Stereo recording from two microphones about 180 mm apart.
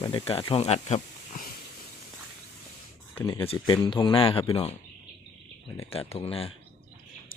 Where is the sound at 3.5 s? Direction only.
25° left (ahead or behind).